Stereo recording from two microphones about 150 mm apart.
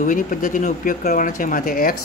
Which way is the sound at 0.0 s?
65° left (ahead or behind).